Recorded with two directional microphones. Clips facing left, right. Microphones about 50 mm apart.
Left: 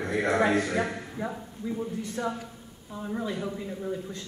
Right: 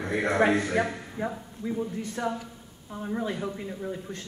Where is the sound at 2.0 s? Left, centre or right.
Right.